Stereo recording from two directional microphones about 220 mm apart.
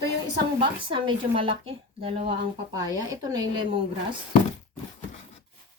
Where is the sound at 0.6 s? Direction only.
20° right (ahead or behind).